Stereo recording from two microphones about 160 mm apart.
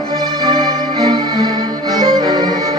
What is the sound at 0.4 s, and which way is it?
Music, 25° right (ahead or behind).